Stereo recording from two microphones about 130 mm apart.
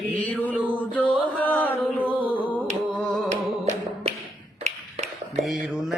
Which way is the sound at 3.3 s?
65° right (ahead or behind).